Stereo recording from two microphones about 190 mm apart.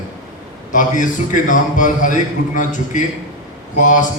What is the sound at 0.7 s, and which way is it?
A man's voice, 45° left (ahead or behind).